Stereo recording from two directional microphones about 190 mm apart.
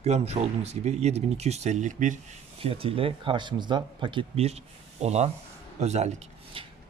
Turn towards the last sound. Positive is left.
turn(degrees=-30)  # may be behind; listen again after turning